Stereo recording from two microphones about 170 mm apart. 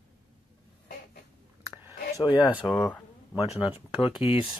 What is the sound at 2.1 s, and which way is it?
Speech, 20° left (ahead or behind).